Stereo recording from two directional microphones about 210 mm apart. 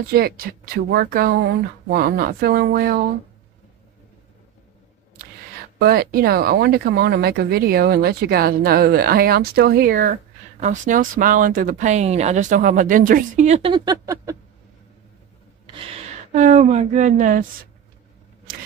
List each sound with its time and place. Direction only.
0.0 s speech: 45° right (ahead or behind)
5.8 s speech: 45° right (ahead or behind); by 14.3 s 15° right (ahead or behind)
15.7 s speech: 25° right (ahead or behind)